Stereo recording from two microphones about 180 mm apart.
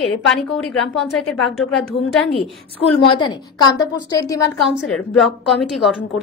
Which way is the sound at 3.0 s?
25° left (ahead or behind).